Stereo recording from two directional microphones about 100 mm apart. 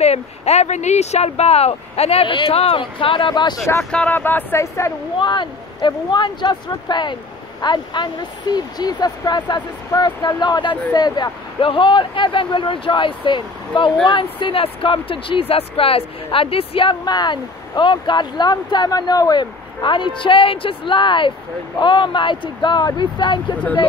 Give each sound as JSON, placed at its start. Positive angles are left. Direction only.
{"t": 0.0, "sound": "speech", "side_deg": 90}
{"t": 3.9, "sound": "speech", "side_deg": 15}
{"t": 5.2, "sound": "speech", "side_deg": 50}
{"t": 11.6, "sound": "speech", "side_deg": 60}
{"t": 17.0, "sound": "speech", "side_deg": 45}